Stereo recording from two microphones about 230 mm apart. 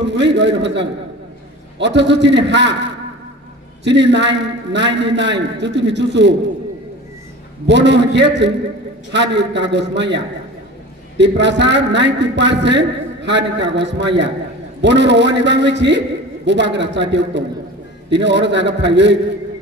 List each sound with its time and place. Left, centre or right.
0.0 s a man's voice: right
7.6 s a man's voice: right